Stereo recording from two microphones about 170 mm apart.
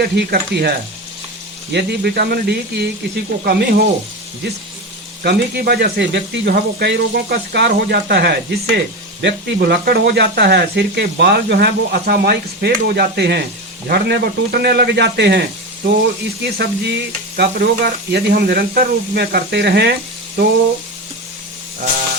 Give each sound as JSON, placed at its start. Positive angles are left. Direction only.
{"t": 0.0, "sound": "speech", "side_deg": -65}
{"t": 5.2, "sound": "speech", "side_deg": -70}